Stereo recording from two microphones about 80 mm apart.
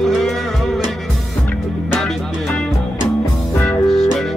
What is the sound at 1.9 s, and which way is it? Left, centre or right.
Music, centre.